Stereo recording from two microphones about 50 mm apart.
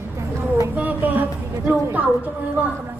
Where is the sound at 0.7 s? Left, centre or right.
Right.